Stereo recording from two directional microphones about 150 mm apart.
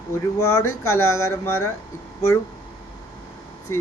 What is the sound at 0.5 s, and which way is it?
Speech, 20° left (ahead or behind).